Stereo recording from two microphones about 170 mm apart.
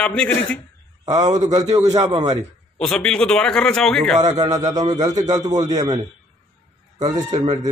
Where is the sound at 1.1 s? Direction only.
25° right (ahead or behind).